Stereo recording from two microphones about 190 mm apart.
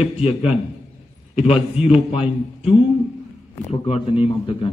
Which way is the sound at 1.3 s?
35° left (ahead or behind).